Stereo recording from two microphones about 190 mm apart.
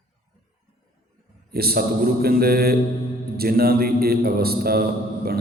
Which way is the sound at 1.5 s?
55° right (ahead or behind).